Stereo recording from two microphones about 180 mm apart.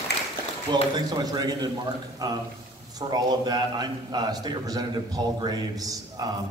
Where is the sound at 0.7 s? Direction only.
25° right (ahead or behind).